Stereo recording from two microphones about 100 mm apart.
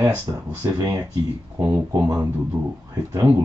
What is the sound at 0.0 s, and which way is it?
Speech, 30° right (ahead or behind).